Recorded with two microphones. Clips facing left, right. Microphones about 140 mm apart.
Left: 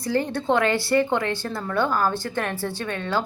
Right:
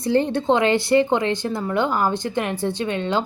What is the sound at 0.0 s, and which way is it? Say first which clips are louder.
A woman's voice: right 5 dB; 25° right (ahead or behind).